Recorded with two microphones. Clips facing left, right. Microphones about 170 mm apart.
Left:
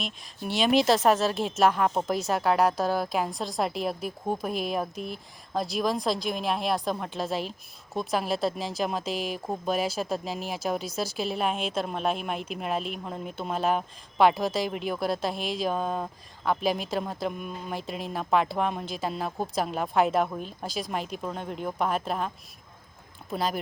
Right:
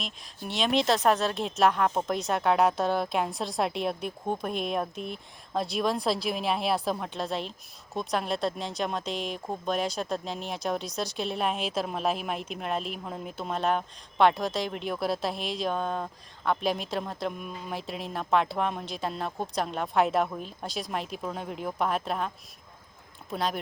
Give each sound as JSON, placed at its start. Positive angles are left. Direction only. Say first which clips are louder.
{"t": 0.0, "sound": "speech", "louder": "left 3 dB", "side_deg": 0}
{"t": 23.3, "sound": "speech", "louder": "left 1 dB", "side_deg": 0}